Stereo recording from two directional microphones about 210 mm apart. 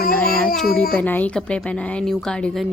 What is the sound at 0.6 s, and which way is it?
Child singing, 45° left (ahead or behind).